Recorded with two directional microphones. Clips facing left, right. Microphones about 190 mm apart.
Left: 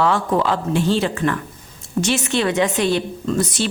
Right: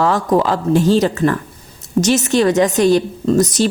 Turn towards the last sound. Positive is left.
turn(degrees=-40)  # may be behind; listen again after turning